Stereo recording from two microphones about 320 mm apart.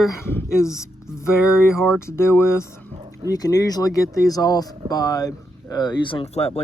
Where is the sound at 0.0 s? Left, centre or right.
Centre.